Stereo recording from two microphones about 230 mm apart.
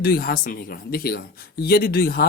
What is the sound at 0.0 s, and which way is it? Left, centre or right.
A man's voice, left.